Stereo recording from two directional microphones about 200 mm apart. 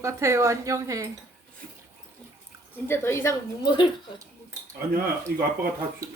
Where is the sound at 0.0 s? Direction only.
15° right (ahead or behind).